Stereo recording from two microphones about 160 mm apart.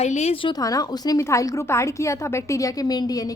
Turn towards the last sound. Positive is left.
turn(degrees=25)  # may be behind; listen again after turning